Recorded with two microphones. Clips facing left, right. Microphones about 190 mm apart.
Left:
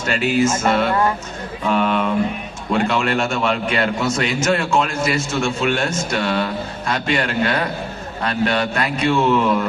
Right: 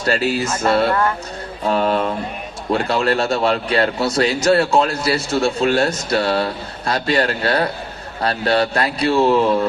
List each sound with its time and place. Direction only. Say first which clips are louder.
0.0 s a man's voice: left 1 dB; 35° right (ahead or behind)